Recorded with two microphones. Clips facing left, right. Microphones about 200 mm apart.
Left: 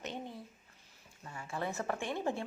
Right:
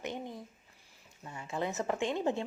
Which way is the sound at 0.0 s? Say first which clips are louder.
Right 3 dB; 15° right (ahead or behind).